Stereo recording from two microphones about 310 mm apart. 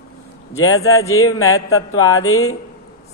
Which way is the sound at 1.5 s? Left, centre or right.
Left.